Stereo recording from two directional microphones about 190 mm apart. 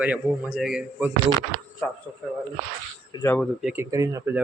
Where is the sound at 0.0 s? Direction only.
5° right (ahead or behind).